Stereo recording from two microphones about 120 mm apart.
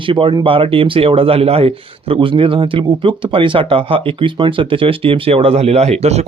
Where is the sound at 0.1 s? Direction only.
45° right (ahead or behind).